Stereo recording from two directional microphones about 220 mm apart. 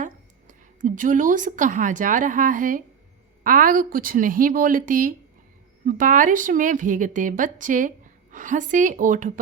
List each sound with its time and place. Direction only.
0.0 s a woman's voice: 35° right (ahead or behind)